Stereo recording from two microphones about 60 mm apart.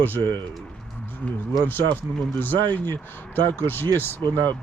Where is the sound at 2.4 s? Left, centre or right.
Left.